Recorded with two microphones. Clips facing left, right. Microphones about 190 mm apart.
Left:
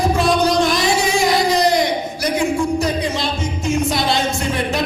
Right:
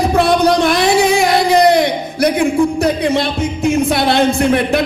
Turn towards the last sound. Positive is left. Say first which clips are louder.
# right 7 dB
turn(degrees=-60)  # may be behind; listen again after turning